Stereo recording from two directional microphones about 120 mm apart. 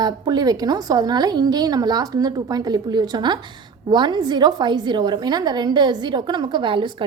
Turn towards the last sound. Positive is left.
turn(degrees=-45)  # may be behind; listen again after turning